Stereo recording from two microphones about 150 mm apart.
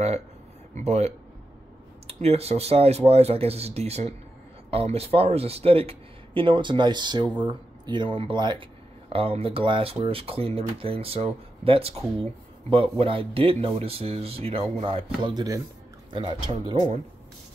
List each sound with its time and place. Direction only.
0.7 s speech: 45° right (ahead or behind)
15.2 s speech: 25° right (ahead or behind)